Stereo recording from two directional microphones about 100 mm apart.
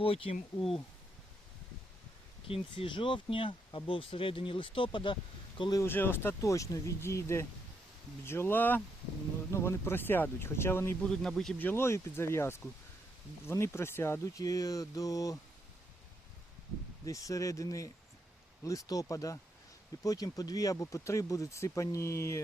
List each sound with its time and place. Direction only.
0.0 s speech: 70° left (ahead or behind)
2.5 s speech: 55° left (ahead or behind)
5.8 s speech: 20° left (ahead or behind)
11.0 s speech: 5° left (ahead or behind)
11.6 s speech: 20° left (ahead or behind)
14.4 s speech: 35° left (ahead or behind)
17.1 s speech: 35° left (ahead or behind)